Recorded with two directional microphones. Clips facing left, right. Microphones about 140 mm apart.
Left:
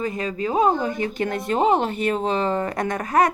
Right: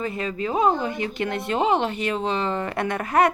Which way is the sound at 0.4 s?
35° left (ahead or behind).